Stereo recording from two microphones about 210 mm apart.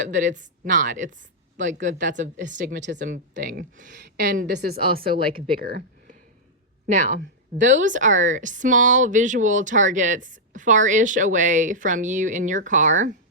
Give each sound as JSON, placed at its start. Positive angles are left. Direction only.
{"t": 0.0, "sound": "speech", "side_deg": -35}
{"t": 3.3, "sound": "speech", "side_deg": -50}
{"t": 3.9, "sound": "speech", "side_deg": -55}